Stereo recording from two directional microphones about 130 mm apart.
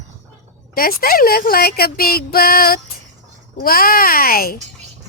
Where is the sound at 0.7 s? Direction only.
90° left.